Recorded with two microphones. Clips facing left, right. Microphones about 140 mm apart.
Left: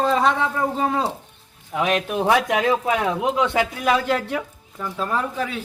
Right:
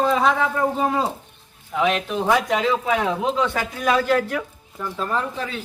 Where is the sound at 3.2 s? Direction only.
20° left (ahead or behind).